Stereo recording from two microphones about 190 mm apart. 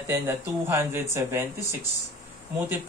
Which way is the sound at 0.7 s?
15° right (ahead or behind).